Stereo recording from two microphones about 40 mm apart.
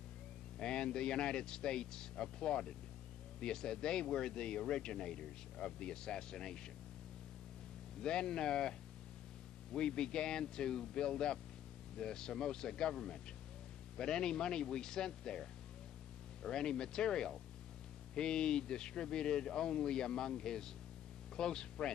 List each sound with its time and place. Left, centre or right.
0.6 s speech: left
8.0 s speech: centre
9.8 s speech: centre
16.4 s speech: centre